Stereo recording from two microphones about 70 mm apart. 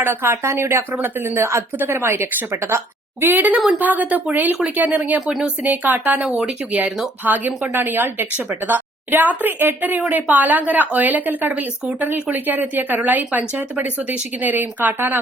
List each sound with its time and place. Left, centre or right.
0.0 s speech: right
5.2 s speech: centre
5.6 s speech: right